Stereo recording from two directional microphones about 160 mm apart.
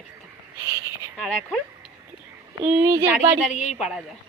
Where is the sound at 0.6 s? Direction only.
20° right (ahead or behind).